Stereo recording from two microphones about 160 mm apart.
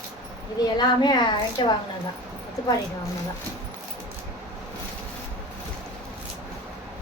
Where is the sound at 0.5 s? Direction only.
25° left (ahead or behind).